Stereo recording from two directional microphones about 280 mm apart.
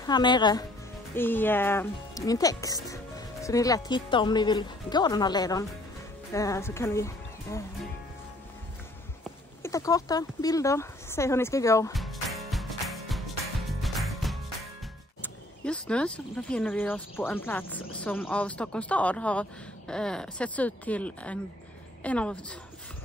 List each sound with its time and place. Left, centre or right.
0.0 s speech: centre
9.6 s speech: centre
11.9 s music: centre
15.2 s speech: centre